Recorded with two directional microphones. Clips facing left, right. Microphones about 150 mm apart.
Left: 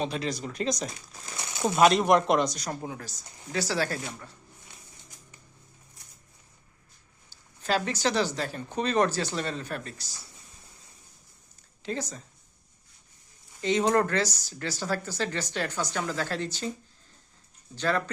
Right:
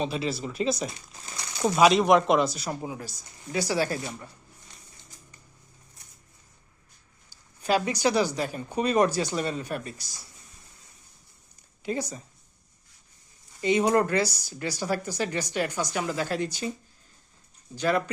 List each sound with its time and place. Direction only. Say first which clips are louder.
0.0 s speech: right 2 dB; 5° right (ahead or behind)
1.4 s a sound: even; 20° left (ahead or behind)
1.6 s speech: right 1 dB; centre (ahead or behind); by 4.3 s 20° right (ahead or behind)
7.3 s speech: right 3 dB; 10° right (ahead or behind)
11.8 s speech: right 3 dB; 10° right (ahead or behind)
13.6 s speech: right 2 dB; 10° right (ahead or behind)
17.7 s speech: right 2 dB; 10° right (ahead or behind)